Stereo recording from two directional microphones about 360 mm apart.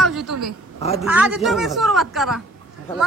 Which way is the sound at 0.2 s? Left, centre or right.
Right.